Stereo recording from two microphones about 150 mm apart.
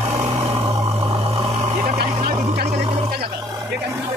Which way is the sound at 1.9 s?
45° right (ahead or behind).